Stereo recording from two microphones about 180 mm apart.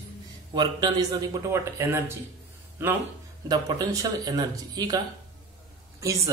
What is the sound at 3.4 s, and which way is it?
Speech, 20° right (ahead or behind).